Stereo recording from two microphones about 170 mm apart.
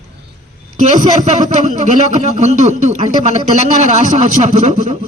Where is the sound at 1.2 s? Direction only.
45° right (ahead or behind).